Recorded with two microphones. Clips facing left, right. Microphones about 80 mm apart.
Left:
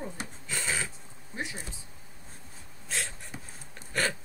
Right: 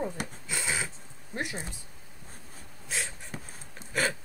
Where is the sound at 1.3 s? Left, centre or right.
Right.